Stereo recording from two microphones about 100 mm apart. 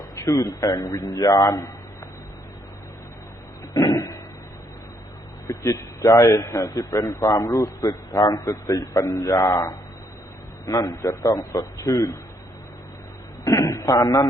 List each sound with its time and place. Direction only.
0.3 s a man's voice: 35° left (ahead or behind)
3.8 s a sound: 35° left (ahead or behind)
5.5 s a man's voice: 30° left (ahead or behind)
13.4 s a man's voice: 35° left (ahead or behind)